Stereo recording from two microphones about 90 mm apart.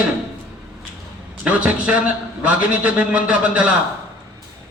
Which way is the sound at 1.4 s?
15° right (ahead or behind).